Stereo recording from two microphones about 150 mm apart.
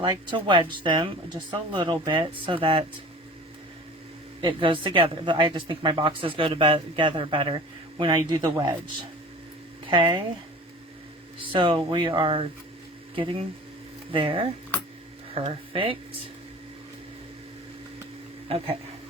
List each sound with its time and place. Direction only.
0.3 s speech: 35° right (ahead or behind)
4.4 s speech: 35° right (ahead or behind)
9.8 s speech: 35° right (ahead or behind)
11.3 s speech: 35° right (ahead or behind)
18.4 s speech: 40° right (ahead or behind)